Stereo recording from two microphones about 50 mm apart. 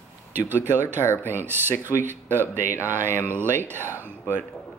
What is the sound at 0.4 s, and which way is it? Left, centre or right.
Speech, right.